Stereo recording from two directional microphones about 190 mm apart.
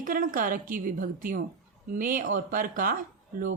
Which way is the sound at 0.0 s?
45° right (ahead or behind).